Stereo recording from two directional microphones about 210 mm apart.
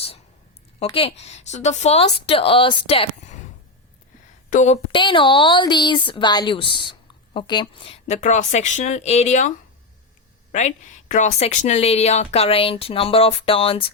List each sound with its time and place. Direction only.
0.9 s speech: 30° left (ahead or behind)
4.4 s speech: 35° left (ahead or behind)
4.9 s speech: 25° left (ahead or behind)
11.1 s speech: 35° left (ahead or behind)